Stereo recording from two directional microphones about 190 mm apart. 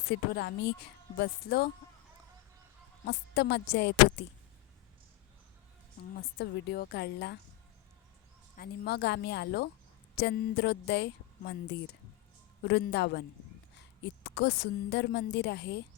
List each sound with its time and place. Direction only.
0.1 s a woman's voice: 65° left (ahead or behind)
3.1 s a woman's voice: 60° left (ahead or behind)
6.4 s a woman's voice: 60° left (ahead or behind)
8.5 s a woman's voice: 55° left (ahead or behind)